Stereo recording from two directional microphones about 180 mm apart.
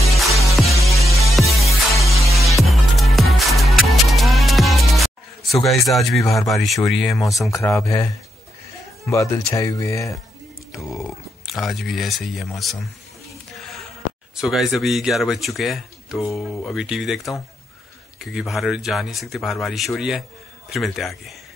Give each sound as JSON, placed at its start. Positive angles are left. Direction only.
{"t": 0.2, "sound": "music", "side_deg": 0}
{"t": 5.7, "sound": "speech", "side_deg": 0}
{"t": 7.5, "sound": "speech", "side_deg": 15}
{"t": 9.1, "sound": "speech", "side_deg": 15}
{"t": 10.7, "sound": "speech", "side_deg": 0}
{"t": 13.5, "sound": "a sound", "side_deg": 0}
{"t": 14.3, "sound": "speech", "side_deg": 0}